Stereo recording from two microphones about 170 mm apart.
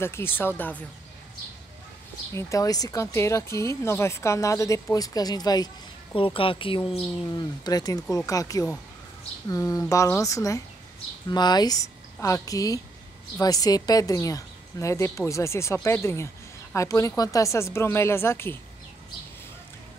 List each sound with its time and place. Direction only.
0.0 s speech: 15° left (ahead or behind)
2.3 s a woman's voice: 20° left (ahead or behind)